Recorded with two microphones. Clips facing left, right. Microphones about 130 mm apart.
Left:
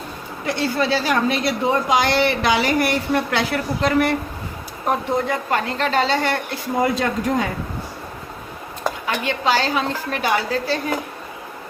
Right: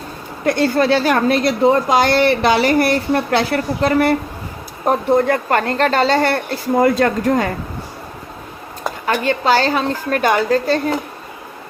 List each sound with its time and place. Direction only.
0.4 s a woman's voice: 50° right (ahead or behind)
1.6 s speech: 40° right (ahead or behind)
4.9 s a woman's voice: 55° right (ahead or behind)
9.1 s a woman's voice: 40° right (ahead or behind)